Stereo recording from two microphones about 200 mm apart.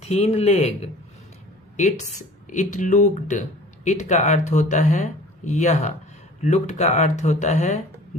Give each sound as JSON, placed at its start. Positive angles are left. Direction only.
{"t": 0.0, "sound": "speech", "side_deg": 30}